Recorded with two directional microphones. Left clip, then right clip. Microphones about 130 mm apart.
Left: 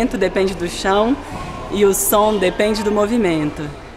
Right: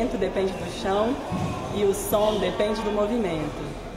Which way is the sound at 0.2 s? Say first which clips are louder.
Left 8 dB; 25° left (ahead or behind).